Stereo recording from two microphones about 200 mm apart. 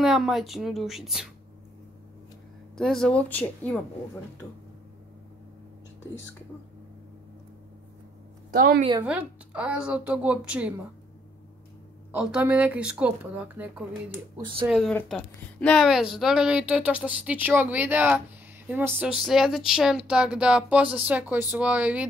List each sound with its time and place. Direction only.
0.0 s speech: centre (ahead or behind)
2.8 s speech: centre (ahead or behind)
8.5 s a woman's voice: 40° right (ahead or behind)
9.0 s speech: 5° right (ahead or behind)
12.1 s speech: 5° right (ahead or behind)
14.3 s speech: 25° right (ahead or behind)
14.7 s speech: centre (ahead or behind)